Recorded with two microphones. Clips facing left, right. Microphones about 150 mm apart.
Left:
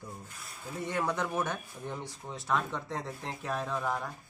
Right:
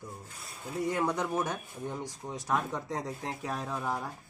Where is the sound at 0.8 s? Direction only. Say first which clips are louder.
Right 1 dB; 10° right (ahead or behind).